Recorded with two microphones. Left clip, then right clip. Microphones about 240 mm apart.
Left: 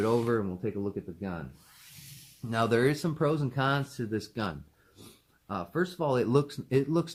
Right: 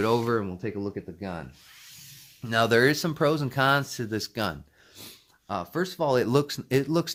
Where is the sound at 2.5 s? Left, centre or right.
Right.